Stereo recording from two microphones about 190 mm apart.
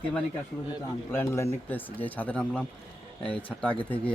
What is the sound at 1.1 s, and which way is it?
A man's voice, 15° left (ahead or behind).